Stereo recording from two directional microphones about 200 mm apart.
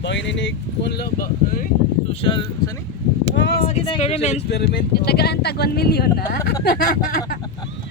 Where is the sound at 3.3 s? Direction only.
60° left (ahead or behind).